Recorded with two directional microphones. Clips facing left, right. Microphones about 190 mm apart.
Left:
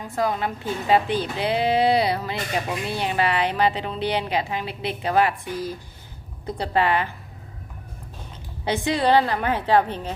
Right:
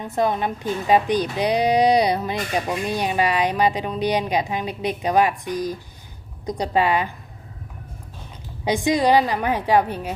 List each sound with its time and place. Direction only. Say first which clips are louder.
0.0 s speech: right 3 dB; 20° right (ahead or behind)
8.6 s speech: right 3 dB; 15° right (ahead or behind)